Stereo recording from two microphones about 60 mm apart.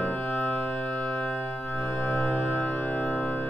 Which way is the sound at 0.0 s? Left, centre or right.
Left.